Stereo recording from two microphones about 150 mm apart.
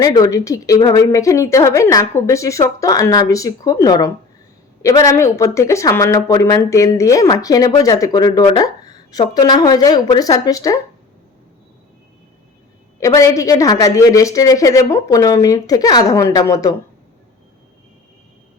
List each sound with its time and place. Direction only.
0.0 s a woman's voice: 25° left (ahead or behind)
13.0 s a woman's voice: 20° left (ahead or behind)